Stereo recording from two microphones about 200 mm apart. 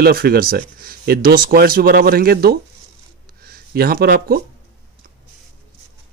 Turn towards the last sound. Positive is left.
turn(degrees=-50)  # may be behind; listen again after turning